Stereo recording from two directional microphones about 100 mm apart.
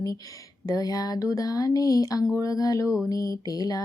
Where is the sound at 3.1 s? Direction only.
35° left (ahead or behind).